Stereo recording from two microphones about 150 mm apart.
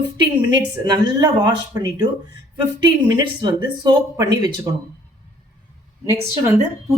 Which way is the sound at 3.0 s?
25° right (ahead or behind).